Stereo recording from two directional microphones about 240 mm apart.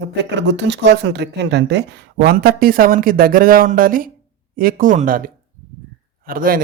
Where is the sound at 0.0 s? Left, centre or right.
Right.